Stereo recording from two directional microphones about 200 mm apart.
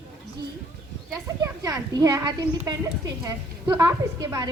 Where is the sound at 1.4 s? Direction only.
15° right (ahead or behind).